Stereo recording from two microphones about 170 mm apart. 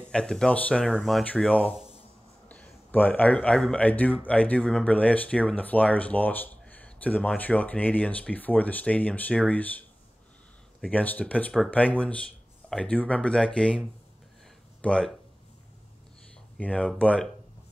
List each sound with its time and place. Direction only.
0.1 s speech: 5° left (ahead or behind)
10.9 s speech: 10° left (ahead or behind)
16.5 s speech: 5° left (ahead or behind)